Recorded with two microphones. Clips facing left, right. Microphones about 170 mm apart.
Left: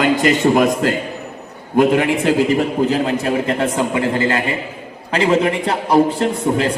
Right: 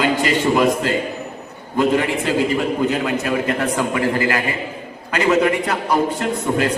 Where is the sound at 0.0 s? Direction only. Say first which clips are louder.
Left 3 dB; 45° left (ahead or behind).